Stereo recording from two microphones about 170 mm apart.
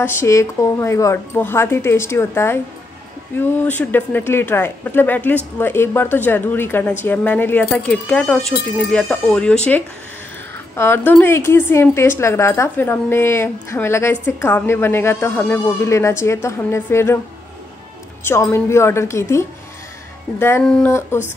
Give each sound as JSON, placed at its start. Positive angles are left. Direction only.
{"t": 0.0, "sound": "a woman's voice", "side_deg": 15}
{"t": 10.8, "sound": "a woman's voice", "side_deg": 15}
{"t": 18.2, "sound": "a woman's voice", "side_deg": 15}